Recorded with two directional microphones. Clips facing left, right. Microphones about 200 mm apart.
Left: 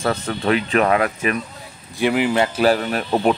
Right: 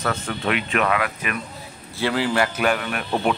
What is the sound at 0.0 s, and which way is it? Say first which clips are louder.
A man's voice: left 4 dB; 35° left (ahead or behind).